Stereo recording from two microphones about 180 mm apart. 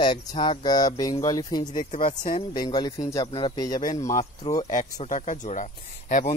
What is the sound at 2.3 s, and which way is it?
Speech, 25° left (ahead or behind).